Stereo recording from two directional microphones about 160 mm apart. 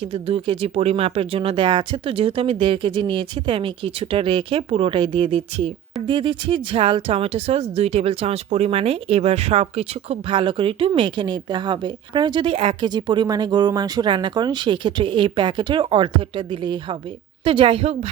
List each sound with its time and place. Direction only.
0.1 s speech: 40° right (ahead or behind)